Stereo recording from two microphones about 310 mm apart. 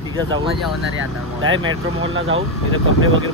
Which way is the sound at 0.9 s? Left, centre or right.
Right.